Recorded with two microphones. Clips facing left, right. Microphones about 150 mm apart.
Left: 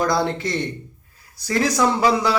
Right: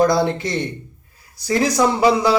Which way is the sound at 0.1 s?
15° right (ahead or behind).